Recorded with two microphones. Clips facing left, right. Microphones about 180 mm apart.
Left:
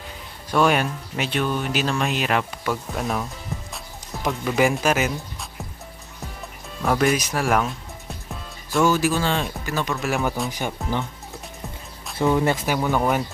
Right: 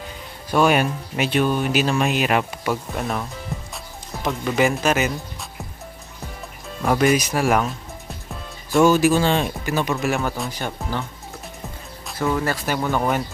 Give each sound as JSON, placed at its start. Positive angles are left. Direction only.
{"t": 0.5, "sound": "speech", "side_deg": -10}
{"t": 2.9, "sound": "speech", "side_deg": 0}
{"t": 4.3, "sound": "speech", "side_deg": 0}
{"t": 6.8, "sound": "speech", "side_deg": -5}
{"t": 8.7, "sound": "speech", "side_deg": -20}
{"t": 10.5, "sound": "speech", "side_deg": 15}
{"t": 12.2, "sound": "speech", "side_deg": 25}
{"t": 12.6, "sound": "speech", "side_deg": 5}